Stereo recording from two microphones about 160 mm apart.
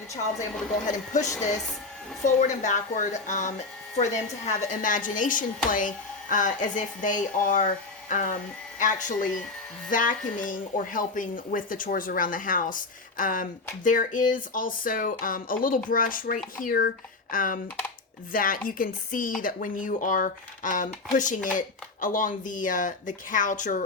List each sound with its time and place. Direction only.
0.9 s a woman's voice: 50° left (ahead or behind)